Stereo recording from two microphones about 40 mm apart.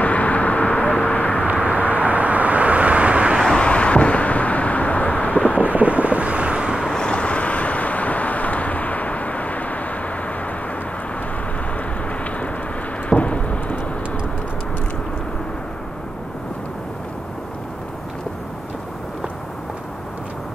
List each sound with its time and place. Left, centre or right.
0.0 s vehicle: left
1.5 s vehicle: right
3.5 s vehicle: left
5.6 s wind noise: right
6.9 s vehicle: left
13.1 s a sound: left